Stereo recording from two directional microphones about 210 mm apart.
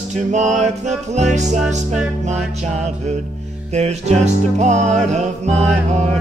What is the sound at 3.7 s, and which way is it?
Music, 30° right (ahead or behind).